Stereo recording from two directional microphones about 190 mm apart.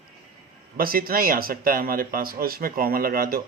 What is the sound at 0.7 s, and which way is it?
Speech, 50° right (ahead or behind).